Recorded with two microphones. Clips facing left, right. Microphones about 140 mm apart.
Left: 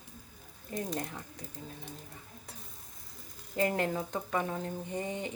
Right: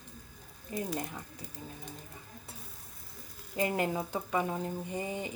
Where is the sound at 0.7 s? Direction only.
5° right (ahead or behind).